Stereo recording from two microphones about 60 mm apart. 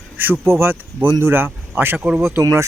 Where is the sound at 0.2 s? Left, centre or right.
Right.